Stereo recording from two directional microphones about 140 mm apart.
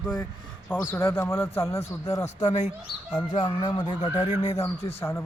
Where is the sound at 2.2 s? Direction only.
55° left (ahead or behind).